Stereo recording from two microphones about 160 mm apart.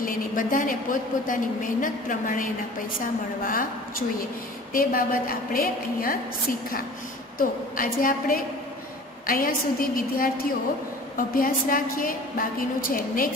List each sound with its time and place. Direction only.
0.0 s a woman's voice: 60° left (ahead or behind)
4.7 s a woman's voice: 60° left (ahead or behind)
7.3 s a woman's voice: 60° left (ahead or behind)